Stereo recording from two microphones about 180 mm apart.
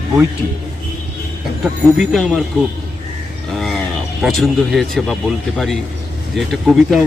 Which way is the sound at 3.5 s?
Centre (ahead or behind).